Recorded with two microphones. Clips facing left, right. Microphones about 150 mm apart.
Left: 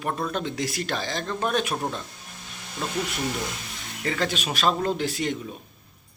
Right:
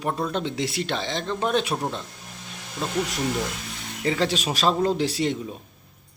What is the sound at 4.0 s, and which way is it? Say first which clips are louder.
Speech: right 3 dB; 30° right (ahead or behind).